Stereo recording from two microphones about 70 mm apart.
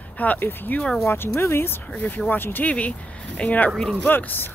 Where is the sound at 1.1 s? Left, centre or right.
Left.